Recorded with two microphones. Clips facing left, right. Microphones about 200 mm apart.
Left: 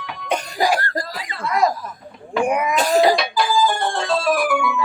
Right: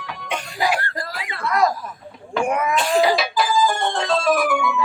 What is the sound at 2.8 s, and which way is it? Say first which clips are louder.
Cough: left 3 dB; 40° left (ahead or behind).